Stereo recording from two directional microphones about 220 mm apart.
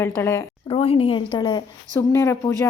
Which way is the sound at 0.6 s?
25° left (ahead or behind).